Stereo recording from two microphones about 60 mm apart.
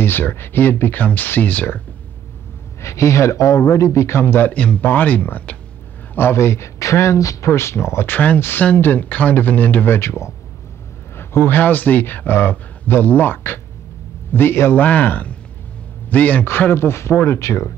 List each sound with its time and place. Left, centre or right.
0.0 s speech: left
2.8 s speech: left
4.5 s speech: left
6.1 s speech: left
8.1 s speech: left
8.4 s speech: left
9.9 s speech: left
14.8 s speech: left
16.4 s speech: left